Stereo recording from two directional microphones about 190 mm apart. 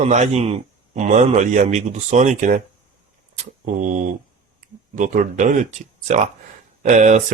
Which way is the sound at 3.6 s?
40° right (ahead or behind).